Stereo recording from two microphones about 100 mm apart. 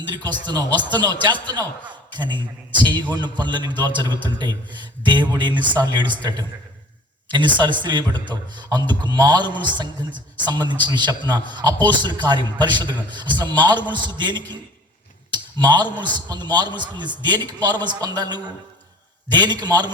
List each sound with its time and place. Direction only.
0.1 s a man's voice: 50° right (ahead or behind)